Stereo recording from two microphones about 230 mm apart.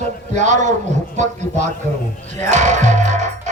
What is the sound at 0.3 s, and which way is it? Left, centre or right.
A man's voice, right.